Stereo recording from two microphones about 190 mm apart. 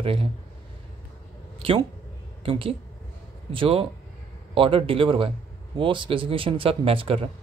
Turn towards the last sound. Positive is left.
turn(degrees=-30)  # may be behind; listen again after turning